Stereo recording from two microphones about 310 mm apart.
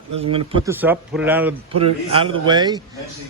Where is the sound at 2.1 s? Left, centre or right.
Centre.